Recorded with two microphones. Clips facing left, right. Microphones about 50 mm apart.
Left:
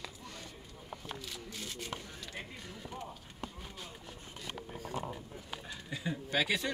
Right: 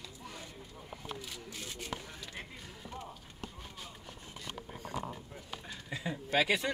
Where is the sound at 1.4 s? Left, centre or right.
Centre.